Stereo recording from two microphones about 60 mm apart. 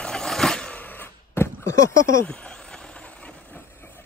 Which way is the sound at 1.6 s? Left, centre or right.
Left.